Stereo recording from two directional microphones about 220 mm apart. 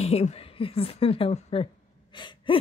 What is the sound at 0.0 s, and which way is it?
Speech, 30° left (ahead or behind).